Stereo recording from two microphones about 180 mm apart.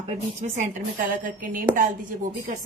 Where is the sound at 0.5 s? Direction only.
45° right (ahead or behind).